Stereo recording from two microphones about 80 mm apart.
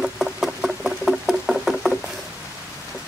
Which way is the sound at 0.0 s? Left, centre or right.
Centre.